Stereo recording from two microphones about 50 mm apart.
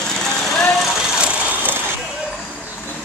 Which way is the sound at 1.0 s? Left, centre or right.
Centre.